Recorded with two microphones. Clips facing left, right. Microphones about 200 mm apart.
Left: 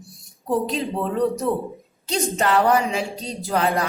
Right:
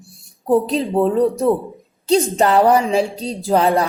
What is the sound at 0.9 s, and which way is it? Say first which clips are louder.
A woman's voice: right 7 dB; 35° right (ahead or behind).